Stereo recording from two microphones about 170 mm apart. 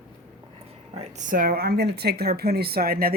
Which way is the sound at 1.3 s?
60° right (ahead or behind).